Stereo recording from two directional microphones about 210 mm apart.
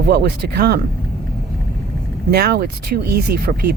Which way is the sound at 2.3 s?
50° right (ahead or behind).